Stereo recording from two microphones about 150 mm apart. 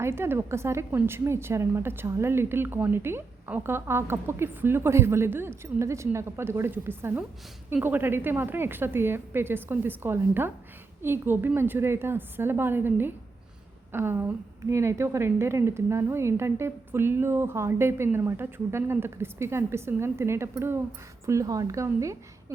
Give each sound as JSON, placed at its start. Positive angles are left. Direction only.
{"t": 0.0, "sound": "a woman's voice", "side_deg": -15}